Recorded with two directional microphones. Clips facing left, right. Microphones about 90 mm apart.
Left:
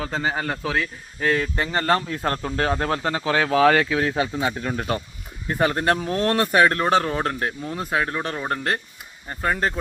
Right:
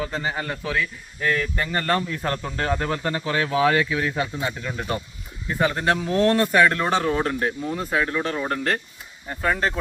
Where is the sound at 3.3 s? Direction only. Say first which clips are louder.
Left 3 dB; 50° left (ahead or behind).